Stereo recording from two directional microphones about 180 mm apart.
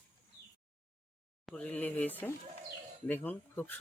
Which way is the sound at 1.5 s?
5° left (ahead or behind).